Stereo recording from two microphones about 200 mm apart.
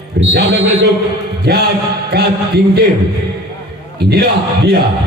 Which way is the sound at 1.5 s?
55° right (ahead or behind).